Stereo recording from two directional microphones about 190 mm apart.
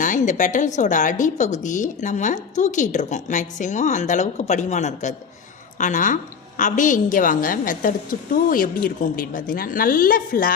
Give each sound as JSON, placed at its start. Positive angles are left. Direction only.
{"t": 0.0, "sound": "a woman's voice", "side_deg": 40}